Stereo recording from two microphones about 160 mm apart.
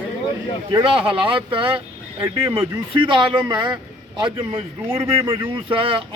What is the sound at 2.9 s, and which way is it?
A man's voice, 30° right (ahead or behind).